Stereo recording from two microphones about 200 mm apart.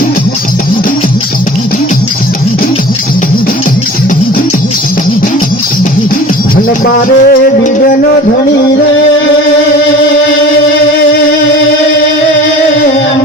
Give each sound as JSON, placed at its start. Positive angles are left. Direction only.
{"t": 6.8, "sound": "music", "side_deg": 45}